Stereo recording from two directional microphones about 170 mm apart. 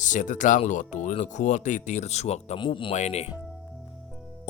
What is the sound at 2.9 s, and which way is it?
Speech, 40° left (ahead or behind).